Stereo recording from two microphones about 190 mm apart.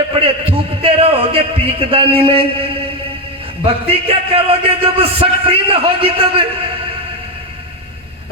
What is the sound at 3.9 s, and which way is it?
A man's voice, 30° right (ahead or behind).